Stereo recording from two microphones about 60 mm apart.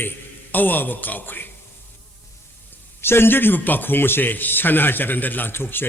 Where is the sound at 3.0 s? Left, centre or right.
Left.